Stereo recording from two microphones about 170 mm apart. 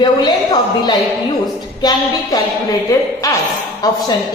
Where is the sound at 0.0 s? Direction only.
25° left (ahead or behind).